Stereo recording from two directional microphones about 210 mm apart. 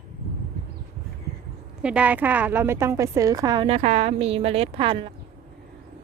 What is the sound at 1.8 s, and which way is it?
A woman's voice, 5° right (ahead or behind).